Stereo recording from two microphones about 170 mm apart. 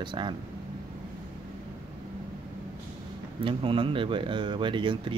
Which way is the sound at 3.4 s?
30° right (ahead or behind).